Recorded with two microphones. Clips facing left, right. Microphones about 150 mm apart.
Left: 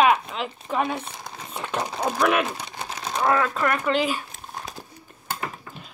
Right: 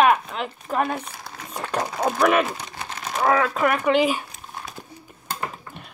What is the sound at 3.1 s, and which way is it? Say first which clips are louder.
Speech: right 2 dB; 5° right (ahead or behind).